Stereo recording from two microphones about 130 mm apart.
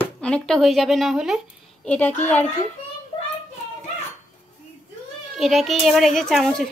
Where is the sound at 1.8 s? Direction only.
10° left (ahead or behind).